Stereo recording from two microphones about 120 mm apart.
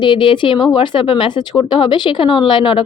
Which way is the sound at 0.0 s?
45° left (ahead or behind).